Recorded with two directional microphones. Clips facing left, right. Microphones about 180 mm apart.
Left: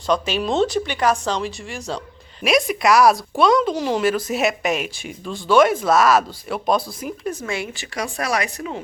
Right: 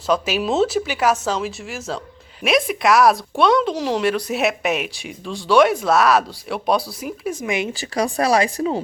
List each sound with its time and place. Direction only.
0.1 s speech: 5° right (ahead or behind)
7.4 s speech: 20° right (ahead or behind)
7.7 s speech: 35° right (ahead or behind)